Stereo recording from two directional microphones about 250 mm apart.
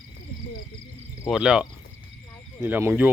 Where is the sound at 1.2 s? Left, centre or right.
Centre.